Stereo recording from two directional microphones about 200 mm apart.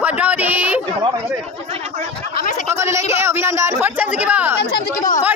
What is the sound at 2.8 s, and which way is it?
Speech, 15° right (ahead or behind).